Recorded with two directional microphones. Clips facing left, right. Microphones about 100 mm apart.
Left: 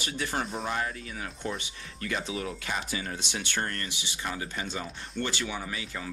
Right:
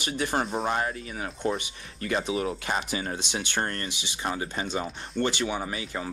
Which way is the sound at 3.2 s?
20° right (ahead or behind).